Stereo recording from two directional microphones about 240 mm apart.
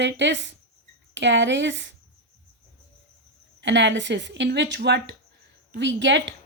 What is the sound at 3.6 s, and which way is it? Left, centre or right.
A woman's voice, right.